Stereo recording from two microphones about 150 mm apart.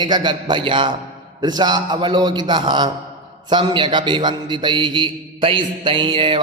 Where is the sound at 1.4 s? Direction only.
30° right (ahead or behind).